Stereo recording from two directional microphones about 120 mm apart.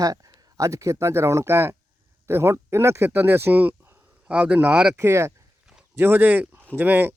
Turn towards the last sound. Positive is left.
turn(degrees=-15)  # may be behind; listen again after turning